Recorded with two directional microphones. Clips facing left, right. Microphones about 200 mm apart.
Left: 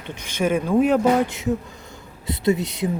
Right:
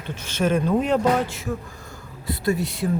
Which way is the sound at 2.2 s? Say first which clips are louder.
Left 3 dB; 20° left (ahead or behind).